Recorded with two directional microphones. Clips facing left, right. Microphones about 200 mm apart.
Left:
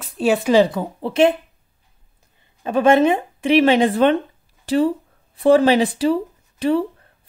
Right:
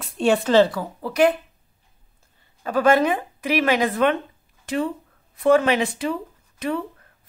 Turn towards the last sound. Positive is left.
turn(degrees=30)  # may be behind; listen again after turning